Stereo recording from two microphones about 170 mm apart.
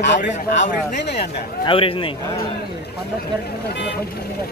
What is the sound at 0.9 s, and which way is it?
Speech, 80° left.